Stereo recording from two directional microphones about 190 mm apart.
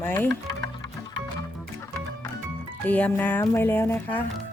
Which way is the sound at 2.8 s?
10° left (ahead or behind).